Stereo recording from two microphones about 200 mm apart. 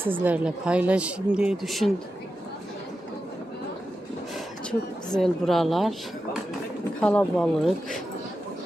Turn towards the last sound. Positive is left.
turn(degrees=5)  # may be behind; listen again after turning